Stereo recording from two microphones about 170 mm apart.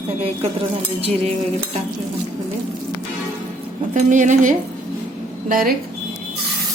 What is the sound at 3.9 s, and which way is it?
Speech, 45° right (ahead or behind).